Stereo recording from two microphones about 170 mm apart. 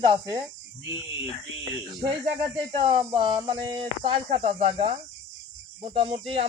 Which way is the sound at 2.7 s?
30° right (ahead or behind).